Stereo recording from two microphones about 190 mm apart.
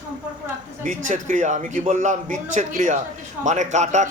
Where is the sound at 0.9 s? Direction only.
40° right (ahead or behind).